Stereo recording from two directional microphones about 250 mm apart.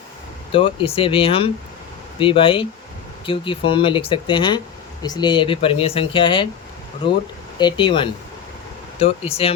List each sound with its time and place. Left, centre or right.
0.5 s speech: left
9.4 s speech: left